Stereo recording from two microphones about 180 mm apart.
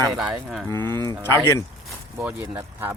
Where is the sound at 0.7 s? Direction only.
15° left (ahead or behind).